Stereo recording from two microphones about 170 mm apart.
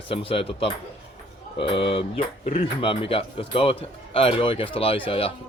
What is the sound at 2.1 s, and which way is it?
Speech, 50° left (ahead or behind).